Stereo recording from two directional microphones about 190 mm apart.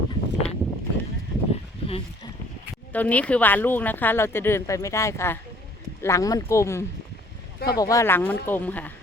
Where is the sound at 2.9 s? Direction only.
10° left (ahead or behind).